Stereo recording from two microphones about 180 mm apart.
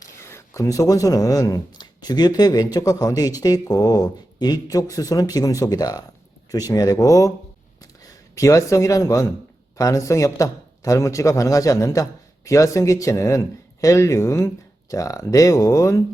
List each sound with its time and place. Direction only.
0.0 s speech: 15° left (ahead or behind)